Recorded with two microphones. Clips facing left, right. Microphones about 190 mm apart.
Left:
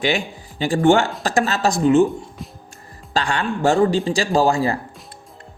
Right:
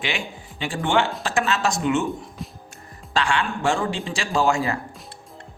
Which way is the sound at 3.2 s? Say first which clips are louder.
Left 2 dB; 40° left (ahead or behind).